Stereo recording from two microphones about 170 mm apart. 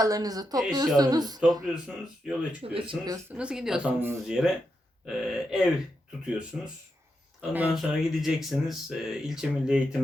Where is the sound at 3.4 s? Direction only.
5° right (ahead or behind).